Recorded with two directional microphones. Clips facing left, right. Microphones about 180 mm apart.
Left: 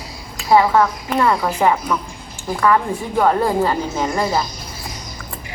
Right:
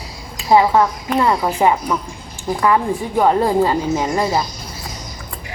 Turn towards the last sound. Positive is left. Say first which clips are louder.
# right 2 dB
turn(degrees=-15)  # may be behind; listen again after turning